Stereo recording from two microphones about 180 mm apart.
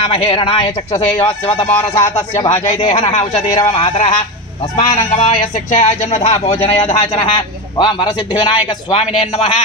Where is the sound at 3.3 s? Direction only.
35° left (ahead or behind).